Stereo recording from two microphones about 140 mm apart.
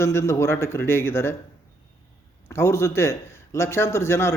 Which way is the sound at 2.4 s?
20° left (ahead or behind).